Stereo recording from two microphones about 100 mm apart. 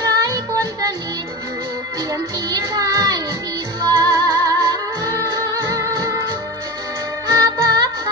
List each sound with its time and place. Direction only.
0.0 s music: 35° right (ahead or behind)
2.5 s music: 40° right (ahead or behind)
7.2 s music: 35° right (ahead or behind)